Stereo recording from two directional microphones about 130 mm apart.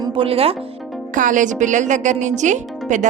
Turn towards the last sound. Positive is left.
turn(degrees=-70)  # may be behind; listen again after turning